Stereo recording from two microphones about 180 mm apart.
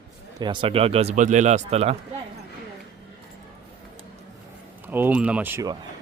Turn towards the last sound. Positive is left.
turn(degrees=-10)  # may be behind; listen again after turning